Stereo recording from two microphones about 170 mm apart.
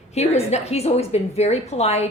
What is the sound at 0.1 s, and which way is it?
A woman's voice, 40° left (ahead or behind).